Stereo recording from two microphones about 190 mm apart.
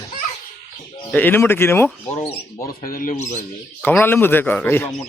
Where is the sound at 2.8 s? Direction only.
45° left (ahead or behind).